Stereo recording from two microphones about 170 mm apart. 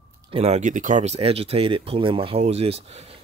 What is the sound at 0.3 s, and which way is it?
Speech, 35° right (ahead or behind).